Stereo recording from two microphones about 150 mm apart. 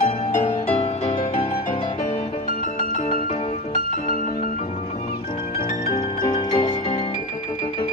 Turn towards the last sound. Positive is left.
turn(degrees=25)  # may be behind; listen again after turning